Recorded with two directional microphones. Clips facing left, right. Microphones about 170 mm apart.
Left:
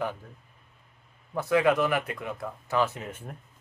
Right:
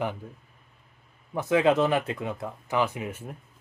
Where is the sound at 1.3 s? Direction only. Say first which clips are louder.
Right 1 dB; 20° right (ahead or behind).